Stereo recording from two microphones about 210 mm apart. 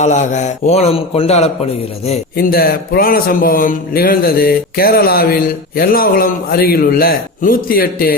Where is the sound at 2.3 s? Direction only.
45° left (ahead or behind).